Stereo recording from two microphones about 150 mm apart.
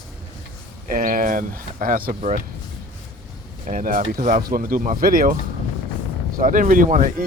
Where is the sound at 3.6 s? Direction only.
65° right (ahead or behind).